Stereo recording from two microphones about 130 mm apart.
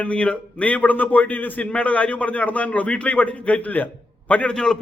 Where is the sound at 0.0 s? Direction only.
10° left (ahead or behind).